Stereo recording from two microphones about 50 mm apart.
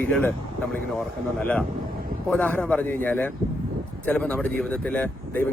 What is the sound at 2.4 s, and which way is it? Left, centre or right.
Speech, left.